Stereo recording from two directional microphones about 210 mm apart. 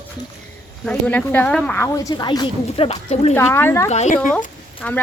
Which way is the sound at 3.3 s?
10° left (ahead or behind).